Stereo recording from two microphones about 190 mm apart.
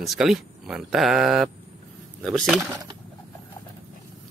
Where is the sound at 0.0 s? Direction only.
Centre (ahead or behind).